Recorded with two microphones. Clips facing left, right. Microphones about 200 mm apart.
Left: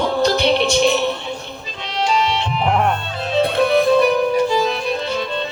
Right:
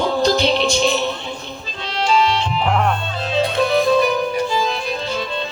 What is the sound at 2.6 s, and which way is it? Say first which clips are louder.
Music: left 2 dB; 10° left (ahead or behind).